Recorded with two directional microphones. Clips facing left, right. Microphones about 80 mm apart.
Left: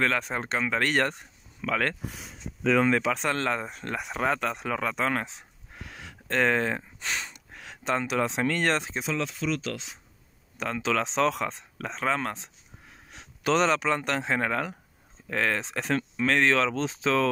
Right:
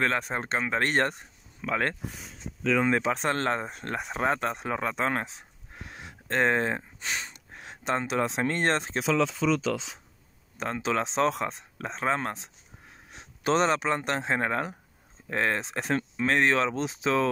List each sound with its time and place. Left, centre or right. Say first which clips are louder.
0.0 s speech: even; right
5.8 s a sound: even; right
10.6 s speech: left 1 dB; right